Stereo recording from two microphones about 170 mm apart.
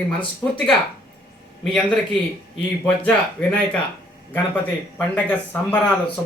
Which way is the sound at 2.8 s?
10° left (ahead or behind).